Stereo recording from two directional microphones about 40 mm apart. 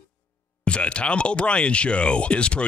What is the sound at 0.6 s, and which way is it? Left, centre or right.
Speech, left.